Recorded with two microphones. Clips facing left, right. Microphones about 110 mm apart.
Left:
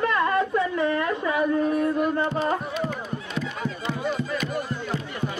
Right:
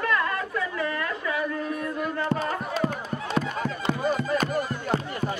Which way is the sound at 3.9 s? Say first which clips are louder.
Right 3 dB; 50° right (ahead or behind).